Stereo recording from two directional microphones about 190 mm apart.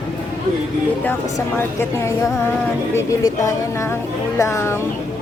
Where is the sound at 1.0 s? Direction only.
10° left (ahead or behind).